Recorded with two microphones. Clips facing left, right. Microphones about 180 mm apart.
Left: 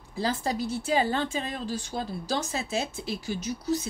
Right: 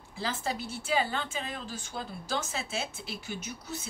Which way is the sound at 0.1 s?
35° left (ahead or behind).